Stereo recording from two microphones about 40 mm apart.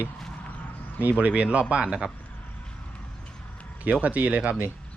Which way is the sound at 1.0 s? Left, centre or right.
Right.